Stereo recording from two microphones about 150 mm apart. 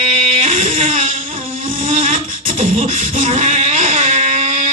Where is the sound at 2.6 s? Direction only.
65° right (ahead or behind).